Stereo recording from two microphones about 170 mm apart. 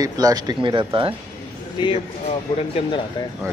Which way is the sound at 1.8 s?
35° left (ahead or behind).